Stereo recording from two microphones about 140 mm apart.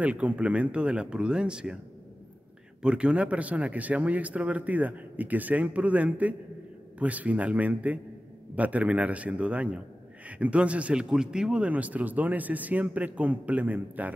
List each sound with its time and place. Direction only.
0.0 s speech: 10° right (ahead or behind)
2.8 s speech: 5° right (ahead or behind)